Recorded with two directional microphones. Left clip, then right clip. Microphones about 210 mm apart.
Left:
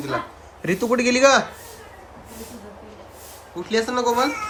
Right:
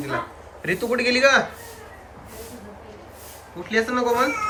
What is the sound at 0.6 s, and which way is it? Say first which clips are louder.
Speech: left 2 dB; 35° left (ahead or behind).